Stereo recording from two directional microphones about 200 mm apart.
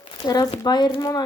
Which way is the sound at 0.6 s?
20° left (ahead or behind).